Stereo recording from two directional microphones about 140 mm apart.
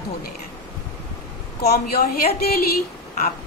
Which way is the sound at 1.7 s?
90° left.